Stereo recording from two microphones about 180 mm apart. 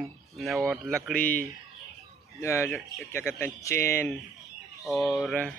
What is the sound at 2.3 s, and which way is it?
A man's voice, 15° left (ahead or behind).